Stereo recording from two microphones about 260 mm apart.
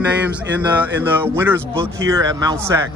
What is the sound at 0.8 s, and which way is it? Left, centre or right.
Speech, centre.